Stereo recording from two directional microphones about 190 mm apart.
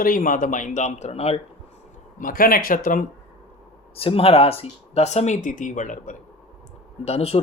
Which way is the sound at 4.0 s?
30° left (ahead or behind).